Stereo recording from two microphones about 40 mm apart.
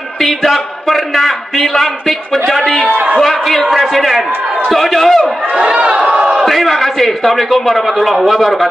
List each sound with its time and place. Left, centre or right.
0.2 s a man's voice: centre
5.6 s speech: centre
6.0 s battle cry: right
6.4 s a man's voice: centre